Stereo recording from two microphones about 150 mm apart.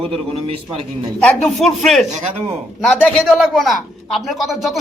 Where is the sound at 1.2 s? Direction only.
5° left (ahead or behind).